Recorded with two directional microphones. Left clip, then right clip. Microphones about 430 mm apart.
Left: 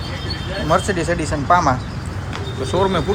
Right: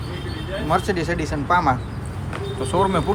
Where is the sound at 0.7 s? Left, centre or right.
Centre.